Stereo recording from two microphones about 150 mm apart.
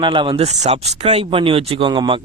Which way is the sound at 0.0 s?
35° right (ahead or behind).